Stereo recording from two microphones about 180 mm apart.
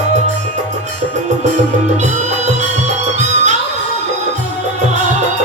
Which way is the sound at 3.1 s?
40° right (ahead or behind).